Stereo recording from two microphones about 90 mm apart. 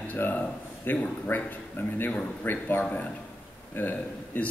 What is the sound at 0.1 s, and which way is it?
A man's voice, 20° left (ahead or behind).